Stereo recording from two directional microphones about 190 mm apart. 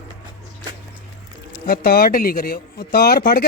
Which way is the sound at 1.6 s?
50° left (ahead or behind).